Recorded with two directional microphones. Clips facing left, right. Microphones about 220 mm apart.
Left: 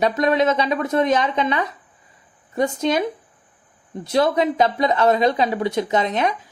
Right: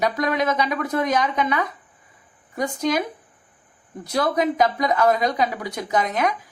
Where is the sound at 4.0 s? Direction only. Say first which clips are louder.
Left 3 dB; 25° left (ahead or behind).